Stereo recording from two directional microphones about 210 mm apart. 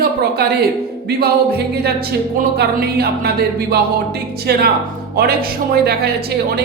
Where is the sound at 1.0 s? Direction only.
50° right (ahead or behind).